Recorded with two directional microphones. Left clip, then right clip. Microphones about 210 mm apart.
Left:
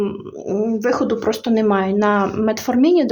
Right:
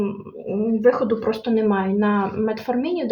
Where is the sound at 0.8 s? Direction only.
50° left (ahead or behind).